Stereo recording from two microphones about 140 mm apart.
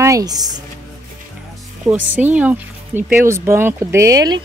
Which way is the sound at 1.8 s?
10° right (ahead or behind).